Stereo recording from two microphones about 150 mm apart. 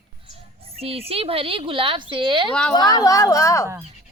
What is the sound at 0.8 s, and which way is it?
A woman's voice, 40° right (ahead or behind).